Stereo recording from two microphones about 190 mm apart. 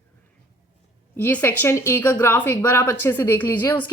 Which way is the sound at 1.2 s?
10° left (ahead or behind).